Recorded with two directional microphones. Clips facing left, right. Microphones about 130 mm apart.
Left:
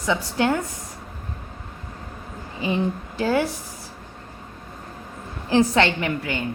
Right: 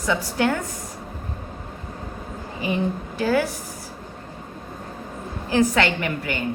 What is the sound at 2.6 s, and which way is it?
Speech, 25° left (ahead or behind).